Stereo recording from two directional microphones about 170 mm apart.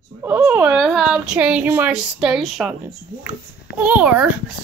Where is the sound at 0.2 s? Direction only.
10° right (ahead or behind).